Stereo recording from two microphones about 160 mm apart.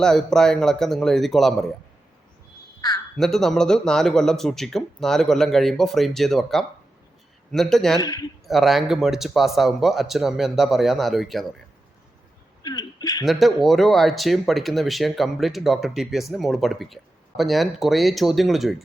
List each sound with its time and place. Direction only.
0.0 s speech: 5° left (ahead or behind)
3.2 s speech: centre (ahead or behind)
7.9 s speech: 25° left (ahead or behind)
8.4 s speech: centre (ahead or behind)
12.6 s a sound: 25° left (ahead or behind)
13.2 s speech: centre (ahead or behind)